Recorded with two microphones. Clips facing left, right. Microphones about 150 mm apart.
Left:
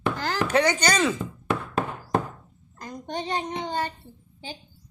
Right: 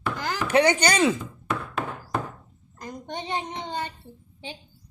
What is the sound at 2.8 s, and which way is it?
A child's voice, 20° right (ahead or behind).